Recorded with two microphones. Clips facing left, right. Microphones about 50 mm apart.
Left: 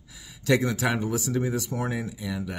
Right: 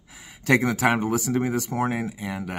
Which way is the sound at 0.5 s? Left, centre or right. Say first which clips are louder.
Right 3 dB; right.